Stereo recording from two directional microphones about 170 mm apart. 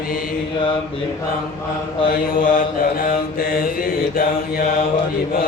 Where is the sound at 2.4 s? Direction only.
50° left (ahead or behind).